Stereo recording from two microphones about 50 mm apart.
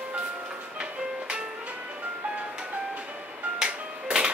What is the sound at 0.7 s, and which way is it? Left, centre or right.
Music, centre.